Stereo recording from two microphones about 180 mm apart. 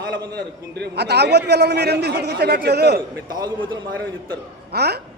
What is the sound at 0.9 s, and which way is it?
A man's voice, 65° right (ahead or behind).